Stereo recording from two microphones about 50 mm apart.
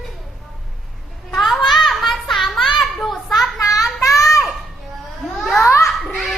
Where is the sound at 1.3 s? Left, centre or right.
Centre.